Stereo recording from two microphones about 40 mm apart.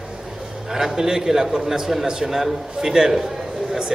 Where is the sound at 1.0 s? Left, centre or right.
Centre.